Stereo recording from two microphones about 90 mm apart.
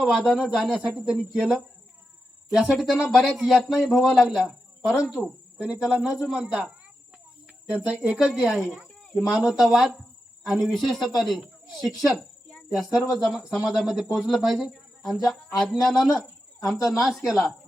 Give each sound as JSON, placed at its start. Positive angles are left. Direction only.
{"t": 0.0, "sound": "speech", "side_deg": 0}
{"t": 8.3, "sound": "speech", "side_deg": -5}
{"t": 16.7, "sound": "speech", "side_deg": 40}
{"t": 17.0, "sound": "speech", "side_deg": -5}